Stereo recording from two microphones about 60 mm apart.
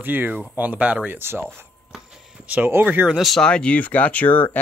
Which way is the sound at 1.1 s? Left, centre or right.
Right.